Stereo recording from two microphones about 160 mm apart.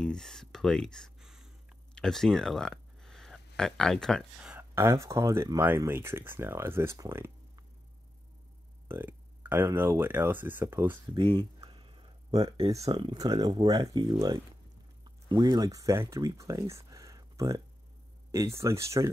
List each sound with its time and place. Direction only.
0.0 s speech: 5° left (ahead or behind); by 7.6 s 15° right (ahead or behind)
8.8 s speech: 15° right (ahead or behind)
11.1 s a sound: 35° right (ahead or behind)
12.8 s speech: 30° right (ahead or behind)